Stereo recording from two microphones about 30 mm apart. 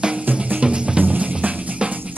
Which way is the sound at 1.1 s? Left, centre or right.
Right.